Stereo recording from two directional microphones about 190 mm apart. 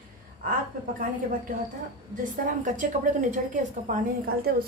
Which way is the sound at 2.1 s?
45° right (ahead or behind).